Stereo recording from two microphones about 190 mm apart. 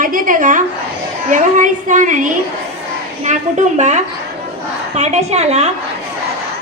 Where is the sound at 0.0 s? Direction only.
45° right (ahead or behind).